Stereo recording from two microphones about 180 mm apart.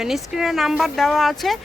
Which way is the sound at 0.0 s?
Centre (ahead or behind).